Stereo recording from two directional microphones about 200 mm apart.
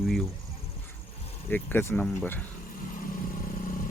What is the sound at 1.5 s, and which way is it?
Speech, 10° left (ahead or behind).